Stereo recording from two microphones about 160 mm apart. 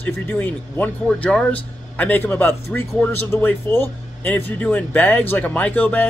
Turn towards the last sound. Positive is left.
turn(degrees=10)  # may be behind; listen again after turning